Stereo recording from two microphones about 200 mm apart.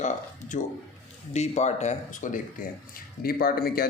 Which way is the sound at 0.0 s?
40° left (ahead or behind).